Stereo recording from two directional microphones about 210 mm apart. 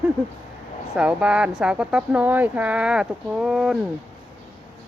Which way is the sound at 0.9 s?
5° right (ahead or behind).